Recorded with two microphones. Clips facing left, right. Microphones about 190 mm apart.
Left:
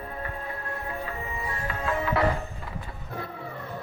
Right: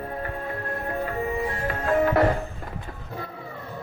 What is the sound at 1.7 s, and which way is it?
Music, 45° right (ahead or behind).